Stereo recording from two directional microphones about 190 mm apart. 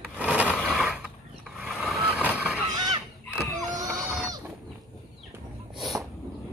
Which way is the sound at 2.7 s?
20° right (ahead or behind).